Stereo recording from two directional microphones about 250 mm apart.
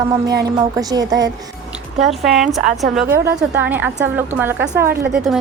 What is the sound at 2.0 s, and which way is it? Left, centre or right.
A woman's voice, centre.